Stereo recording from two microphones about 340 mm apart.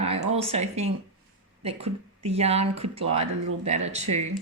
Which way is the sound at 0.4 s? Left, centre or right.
Centre.